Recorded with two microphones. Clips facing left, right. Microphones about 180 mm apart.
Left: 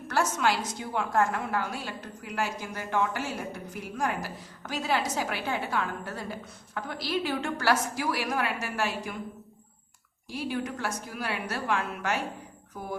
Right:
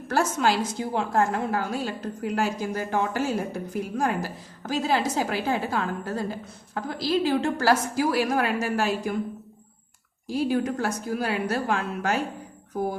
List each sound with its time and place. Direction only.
0.1 s a woman's voice: 30° right (ahead or behind)
10.5 s a woman's voice: 40° right (ahead or behind)